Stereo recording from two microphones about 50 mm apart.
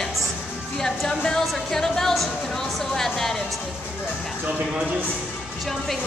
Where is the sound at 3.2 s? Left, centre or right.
Centre.